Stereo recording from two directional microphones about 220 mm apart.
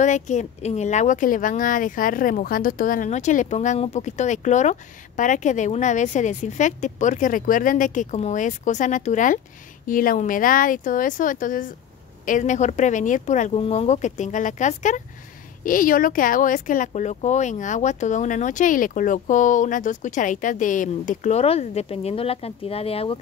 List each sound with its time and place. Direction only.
0.0 s speech: 35° left (ahead or behind)